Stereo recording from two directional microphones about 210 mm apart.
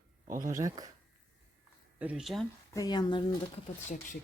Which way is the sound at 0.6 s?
15° right (ahead or behind).